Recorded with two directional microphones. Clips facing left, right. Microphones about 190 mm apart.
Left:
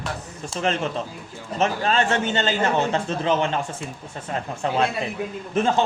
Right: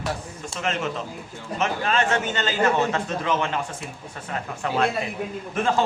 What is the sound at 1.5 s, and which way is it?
A man's voice, 35° left (ahead or behind).